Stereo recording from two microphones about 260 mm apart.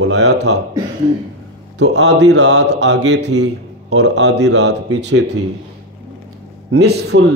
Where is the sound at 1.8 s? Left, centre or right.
Right.